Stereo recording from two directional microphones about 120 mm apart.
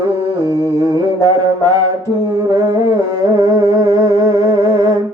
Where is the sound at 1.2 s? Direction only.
30° right (ahead or behind).